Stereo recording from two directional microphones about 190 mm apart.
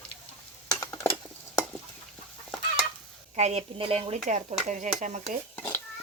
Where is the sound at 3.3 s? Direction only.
35° right (ahead or behind).